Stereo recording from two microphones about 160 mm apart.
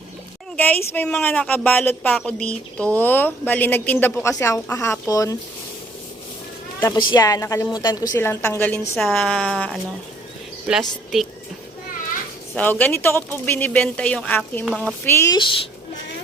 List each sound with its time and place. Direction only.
0.5 s speech: 10° left (ahead or behind)
6.7 s a woman's voice: 15° left (ahead or behind)
8.2 s speech: 10° left (ahead or behind)
12.5 s speech: 10° left (ahead or behind)
15.0 s speech: 15° left (ahead or behind)
15.4 s speech: 30° left (ahead or behind)